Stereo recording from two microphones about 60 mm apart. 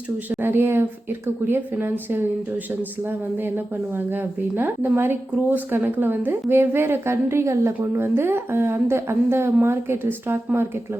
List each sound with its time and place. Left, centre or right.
0.3 s a woman's voice: right
3.4 s a woman's voice: right
7.8 s a woman's voice: right